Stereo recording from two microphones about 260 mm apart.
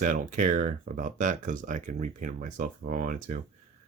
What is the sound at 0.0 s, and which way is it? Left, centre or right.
Speech, right.